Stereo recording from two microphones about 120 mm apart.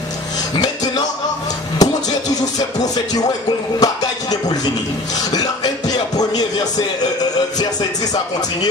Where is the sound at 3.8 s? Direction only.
35° left (ahead or behind).